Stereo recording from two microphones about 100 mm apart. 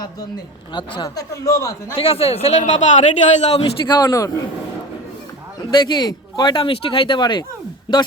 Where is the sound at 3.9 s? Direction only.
35° left (ahead or behind).